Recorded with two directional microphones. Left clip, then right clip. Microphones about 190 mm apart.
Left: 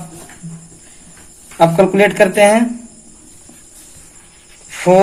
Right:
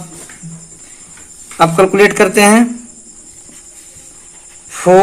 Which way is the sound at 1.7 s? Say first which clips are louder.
Right 2 dB; 55° right (ahead or behind).